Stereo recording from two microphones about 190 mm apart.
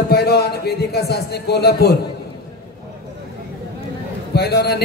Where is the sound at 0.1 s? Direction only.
55° left (ahead or behind).